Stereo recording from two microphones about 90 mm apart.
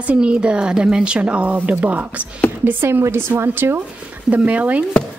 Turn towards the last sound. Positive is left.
turn(degrees=-15)  # may be behind; listen again after turning